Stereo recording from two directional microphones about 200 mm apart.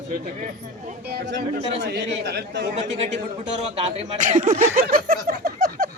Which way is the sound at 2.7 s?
35° right (ahead or behind).